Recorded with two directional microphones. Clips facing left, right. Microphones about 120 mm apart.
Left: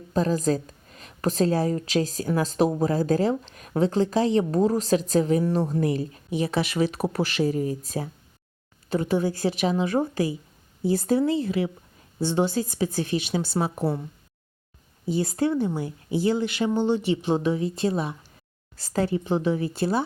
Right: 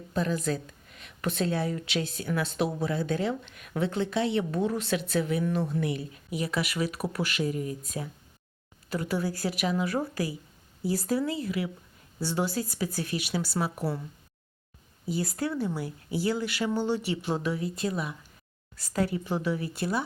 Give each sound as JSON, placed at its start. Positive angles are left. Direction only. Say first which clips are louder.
{"t": 0.1, "sound": "a woman's voice", "louder": "left 6 dB", "side_deg": 35}
{"t": 15.0, "sound": "speech", "louder": "left 6 dB", "side_deg": 25}